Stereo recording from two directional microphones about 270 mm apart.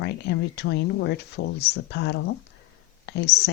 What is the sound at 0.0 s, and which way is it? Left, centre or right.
Speech, left.